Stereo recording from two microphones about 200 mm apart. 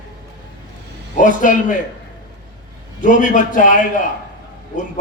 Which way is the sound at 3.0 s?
40° left (ahead or behind).